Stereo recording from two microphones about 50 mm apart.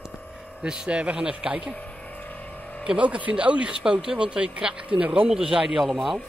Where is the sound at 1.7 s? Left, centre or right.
Left.